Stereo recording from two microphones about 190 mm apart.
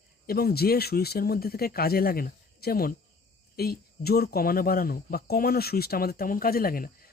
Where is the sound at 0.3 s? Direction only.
55° left (ahead or behind).